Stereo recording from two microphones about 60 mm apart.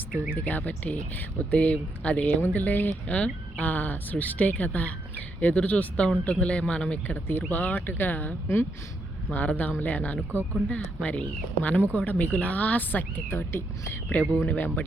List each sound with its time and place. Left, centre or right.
0.4 s speech: left
1.5 s speech: left
7.1 s speech: left
13.3 s speech: left
14.1 s speech: left